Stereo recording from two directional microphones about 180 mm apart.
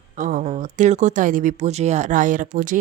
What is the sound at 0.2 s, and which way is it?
Speech, 45° right (ahead or behind).